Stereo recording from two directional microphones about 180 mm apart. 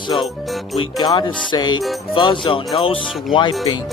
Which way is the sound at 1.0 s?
25° left (ahead or behind).